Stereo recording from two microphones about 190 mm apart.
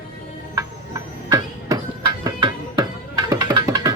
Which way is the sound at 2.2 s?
25° right (ahead or behind).